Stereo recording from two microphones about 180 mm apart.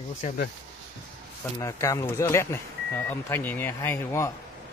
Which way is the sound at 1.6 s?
15° left (ahead or behind).